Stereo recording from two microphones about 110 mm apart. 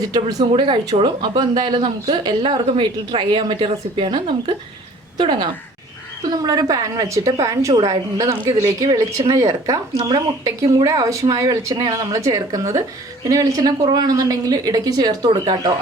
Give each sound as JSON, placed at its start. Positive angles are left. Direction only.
{"t": 0.1, "sound": "a woman's voice", "side_deg": -35}
{"t": 0.5, "sound": "speech", "side_deg": -45}
{"t": 6.3, "sound": "a woman's voice", "side_deg": -35}
{"t": 10.8, "sound": "a woman's voice", "side_deg": -30}